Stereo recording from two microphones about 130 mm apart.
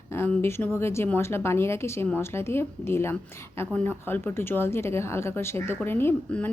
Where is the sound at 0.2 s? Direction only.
20° left (ahead or behind).